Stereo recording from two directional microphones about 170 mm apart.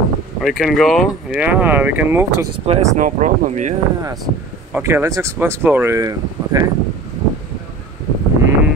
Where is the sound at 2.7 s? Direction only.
40° right (ahead or behind).